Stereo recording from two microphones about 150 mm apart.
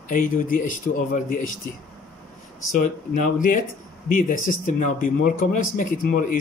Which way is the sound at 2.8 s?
60° left (ahead or behind).